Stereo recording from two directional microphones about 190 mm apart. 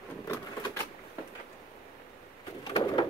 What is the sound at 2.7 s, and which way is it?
Bird, 25° left (ahead or behind).